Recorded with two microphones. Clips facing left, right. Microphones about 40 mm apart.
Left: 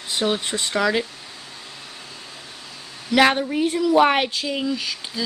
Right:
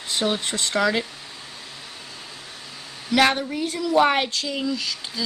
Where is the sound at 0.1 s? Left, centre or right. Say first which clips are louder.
Left 1 dB; centre.